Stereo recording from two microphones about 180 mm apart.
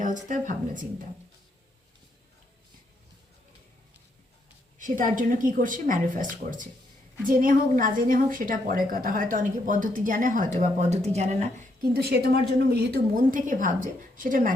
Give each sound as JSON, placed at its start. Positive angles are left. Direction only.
{"t": 0.3, "sound": "a woman's voice", "side_deg": -50}
{"t": 4.8, "sound": "a woman's voice", "side_deg": -45}
{"t": 7.3, "sound": "a woman's voice", "side_deg": -50}
{"t": 11.8, "sound": "a woman's voice", "side_deg": -60}
{"t": 13.3, "sound": "a woman's voice", "side_deg": -45}